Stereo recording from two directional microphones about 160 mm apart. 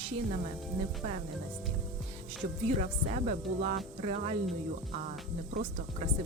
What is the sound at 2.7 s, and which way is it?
Speech, 45° right (ahead or behind).